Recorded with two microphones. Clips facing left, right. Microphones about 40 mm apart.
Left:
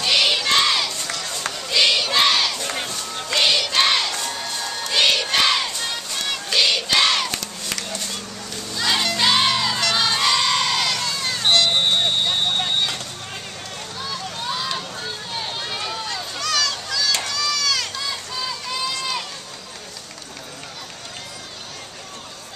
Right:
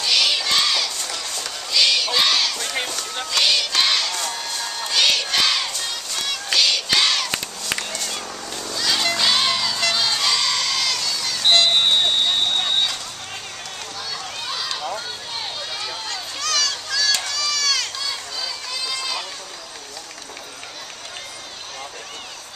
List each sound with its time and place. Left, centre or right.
0.0 s crowd: centre
4.2 s crowd: centre
4.9 s music: centre
8.7 s music: centre
9.0 s crowd: centre
11.0 s a sound: left
11.4 s vehicle: centre
14.5 s run: centre
15.9 s a sound: centre
18.7 s run: centre